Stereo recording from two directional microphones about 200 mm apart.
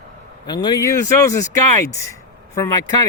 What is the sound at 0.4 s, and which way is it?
Speech, 20° left (ahead or behind).